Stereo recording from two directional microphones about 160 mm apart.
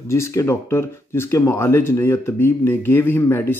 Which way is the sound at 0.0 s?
15° left (ahead or behind).